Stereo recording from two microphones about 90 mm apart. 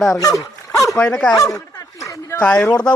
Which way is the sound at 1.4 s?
35° left (ahead or behind).